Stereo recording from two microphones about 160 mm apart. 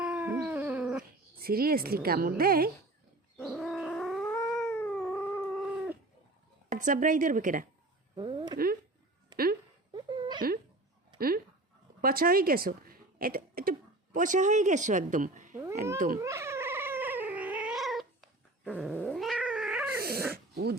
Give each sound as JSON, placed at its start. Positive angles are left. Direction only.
{"t": 0.0, "sound": "dog", "side_deg": -10}
{"t": 1.4, "sound": "a woman's voice", "side_deg": -70}
{"t": 3.3, "sound": "bird", "side_deg": 0}
{"t": 4.2, "sound": "cat", "side_deg": 10}
{"t": 4.7, "sound": "dog", "side_deg": 10}
{"t": 6.7, "sound": "a woman's voice", "side_deg": -50}
{"t": 8.1, "sound": "a sound", "side_deg": -30}
{"t": 8.5, "sound": "a woman's voice", "side_deg": -65}
{"t": 9.9, "sound": "a sound", "side_deg": -30}
{"t": 11.2, "sound": "dog", "side_deg": -70}
{"t": 12.0, "sound": "speech", "side_deg": -65}
{"t": 16.2, "sound": "cat", "side_deg": -15}
{"t": 20.0, "sound": "dog", "side_deg": -75}